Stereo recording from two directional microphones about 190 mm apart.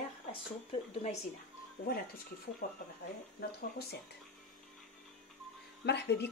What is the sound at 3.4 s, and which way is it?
Speech, 60° left (ahead or behind).